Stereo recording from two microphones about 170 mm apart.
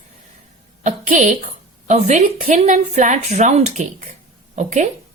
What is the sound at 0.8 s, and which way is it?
Speech, 45° right (ahead or behind).